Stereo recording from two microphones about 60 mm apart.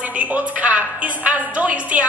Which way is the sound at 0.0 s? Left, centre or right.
Right.